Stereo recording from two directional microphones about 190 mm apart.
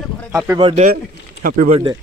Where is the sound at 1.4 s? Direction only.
45° right (ahead or behind).